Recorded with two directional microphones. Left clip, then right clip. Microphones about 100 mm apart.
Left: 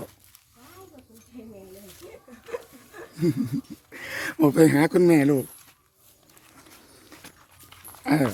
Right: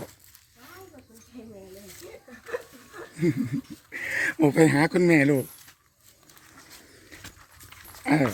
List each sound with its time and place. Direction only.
2.0 s a sound: 35° left (ahead or behind)
3.9 s speech: 35° left (ahead or behind)
8.0 s dog: 20° left (ahead or behind)